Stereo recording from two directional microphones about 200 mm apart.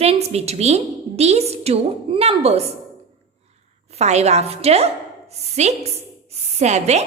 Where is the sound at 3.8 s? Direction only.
35° right (ahead or behind).